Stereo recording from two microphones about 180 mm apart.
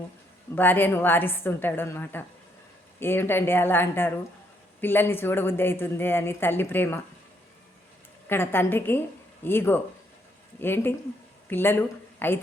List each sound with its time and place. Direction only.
0.5 s speech: 10° left (ahead or behind)
8.3 s speech: 10° left (ahead or behind)